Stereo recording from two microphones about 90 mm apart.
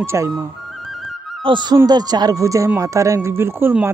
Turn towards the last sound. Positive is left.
turn(degrees=-25)  # may be behind; listen again after turning